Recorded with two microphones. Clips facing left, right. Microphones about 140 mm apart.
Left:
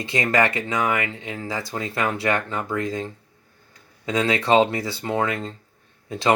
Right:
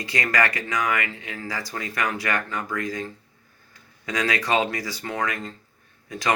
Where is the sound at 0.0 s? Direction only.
25° left (ahead or behind).